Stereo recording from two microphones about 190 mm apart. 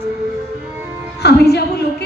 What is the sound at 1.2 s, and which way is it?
Music, 60° left (ahead or behind).